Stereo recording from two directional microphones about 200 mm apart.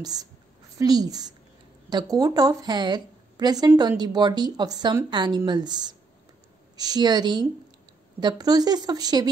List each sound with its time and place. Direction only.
0.0 s a woman's voice: 20° right (ahead or behind)